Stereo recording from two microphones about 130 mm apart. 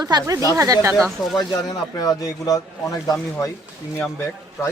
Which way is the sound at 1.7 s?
30° left (ahead or behind).